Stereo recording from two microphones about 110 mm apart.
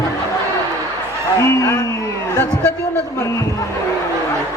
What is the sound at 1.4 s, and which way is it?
A man's voice, 25° left (ahead or behind).